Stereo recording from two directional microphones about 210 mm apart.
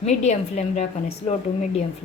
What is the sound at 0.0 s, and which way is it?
A woman's voice, 30° left (ahead or behind).